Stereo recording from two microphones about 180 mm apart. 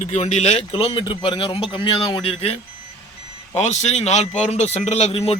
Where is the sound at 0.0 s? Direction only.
40° left (ahead or behind).